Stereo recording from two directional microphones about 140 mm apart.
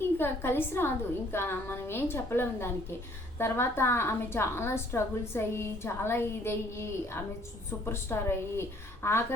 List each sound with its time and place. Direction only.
0.2 s a woman's voice: 15° left (ahead or behind)